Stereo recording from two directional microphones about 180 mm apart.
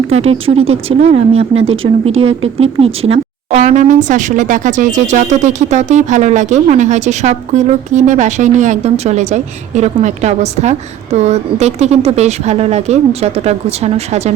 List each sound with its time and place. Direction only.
0.1 s speech: 35° right (ahead or behind)